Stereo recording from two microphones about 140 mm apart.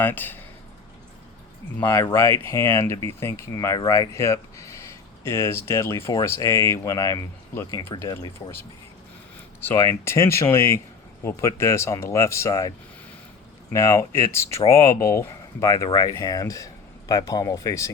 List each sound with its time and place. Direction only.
0.0 s speech: 15° left (ahead or behind)
1.8 s speech: 15° left (ahead or behind)
13.7 s speech: 20° left (ahead or behind)